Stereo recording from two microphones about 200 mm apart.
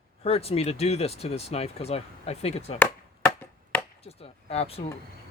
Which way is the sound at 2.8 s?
10° left (ahead or behind).